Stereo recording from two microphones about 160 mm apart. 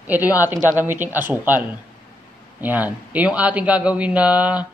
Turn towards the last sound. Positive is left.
turn(degrees=-10)  # may be behind; listen again after turning